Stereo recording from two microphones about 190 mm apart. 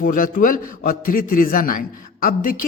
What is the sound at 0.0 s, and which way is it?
Speech, 45° left (ahead or behind).